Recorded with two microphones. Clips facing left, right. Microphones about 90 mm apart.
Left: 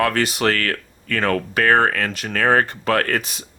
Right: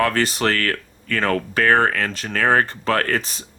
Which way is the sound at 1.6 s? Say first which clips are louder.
Even; 40° left (ahead or behind).